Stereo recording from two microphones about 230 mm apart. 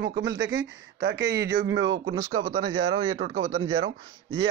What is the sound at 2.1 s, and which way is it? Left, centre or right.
Speech, right.